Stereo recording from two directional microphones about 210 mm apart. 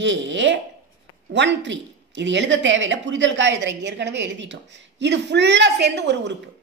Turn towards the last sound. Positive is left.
turn(degrees=-55)  # may be behind; listen again after turning